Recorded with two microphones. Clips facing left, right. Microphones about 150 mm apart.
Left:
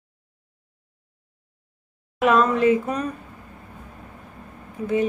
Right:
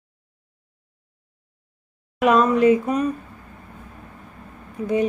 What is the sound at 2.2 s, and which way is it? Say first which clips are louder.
Speech: right 2 dB; 15° right (ahead or behind).